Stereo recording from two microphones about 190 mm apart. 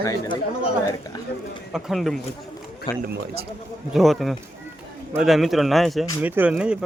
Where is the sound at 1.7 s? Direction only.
Centre (ahead or behind).